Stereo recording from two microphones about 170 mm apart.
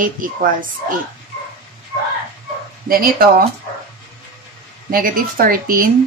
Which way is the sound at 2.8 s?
60° right (ahead or behind).